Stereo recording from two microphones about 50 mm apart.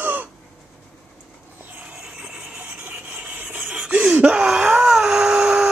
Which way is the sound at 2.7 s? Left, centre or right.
Right.